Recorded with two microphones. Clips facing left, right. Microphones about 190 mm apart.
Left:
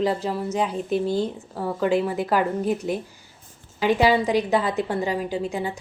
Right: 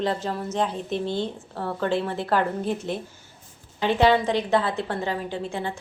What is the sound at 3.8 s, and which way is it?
A woman's voice, 10° left (ahead or behind).